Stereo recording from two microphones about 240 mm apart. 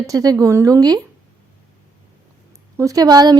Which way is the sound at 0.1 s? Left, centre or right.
Centre.